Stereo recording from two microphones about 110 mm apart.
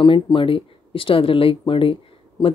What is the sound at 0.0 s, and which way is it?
Speech, 50° left (ahead or behind).